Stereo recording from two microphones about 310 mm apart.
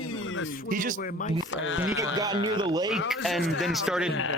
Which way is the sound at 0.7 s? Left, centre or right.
Right.